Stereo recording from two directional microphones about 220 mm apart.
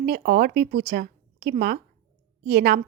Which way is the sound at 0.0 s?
45° right (ahead or behind).